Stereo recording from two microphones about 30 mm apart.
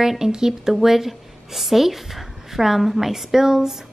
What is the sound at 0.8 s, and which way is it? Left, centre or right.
A woman's voice, centre.